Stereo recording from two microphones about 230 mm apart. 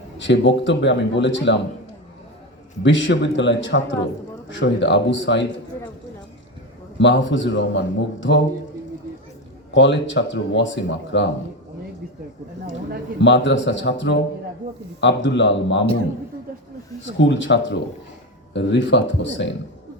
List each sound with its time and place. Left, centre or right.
0.2 s a man's voice: left
2.8 s a man's voice: left
7.0 s a man's voice: left
9.7 s a man's voice: left
13.2 s a man's voice: left
17.0 s a man's voice: left